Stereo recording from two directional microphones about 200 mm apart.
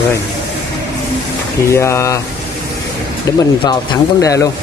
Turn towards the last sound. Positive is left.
turn(degrees=15)  # may be behind; listen again after turning